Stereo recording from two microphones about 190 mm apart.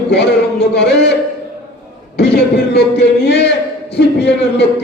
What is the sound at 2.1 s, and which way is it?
A man's voice, 60° left (ahead or behind).